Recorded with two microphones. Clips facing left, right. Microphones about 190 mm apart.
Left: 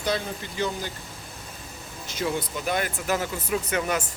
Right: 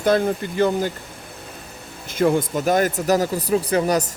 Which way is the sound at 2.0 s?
55° right (ahead or behind).